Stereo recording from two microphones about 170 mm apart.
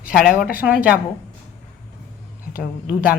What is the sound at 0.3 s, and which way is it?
Speech, 60° left (ahead or behind).